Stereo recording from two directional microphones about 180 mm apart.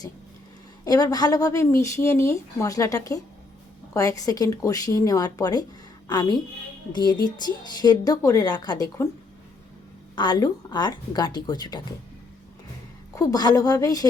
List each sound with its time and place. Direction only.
0.9 s a woman's voice: 20° left (ahead or behind)
10.2 s speech: 25° left (ahead or behind)
13.1 s speech: 20° left (ahead or behind)